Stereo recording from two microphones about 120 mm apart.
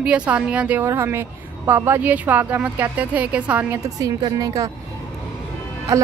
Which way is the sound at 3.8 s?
30° right (ahead or behind).